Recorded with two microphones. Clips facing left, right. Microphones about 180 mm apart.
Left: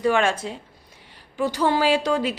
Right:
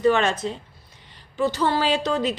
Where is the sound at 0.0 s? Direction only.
10° left (ahead or behind).